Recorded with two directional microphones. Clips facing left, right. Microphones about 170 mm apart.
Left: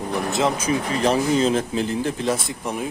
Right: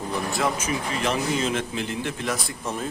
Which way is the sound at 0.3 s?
25° left (ahead or behind).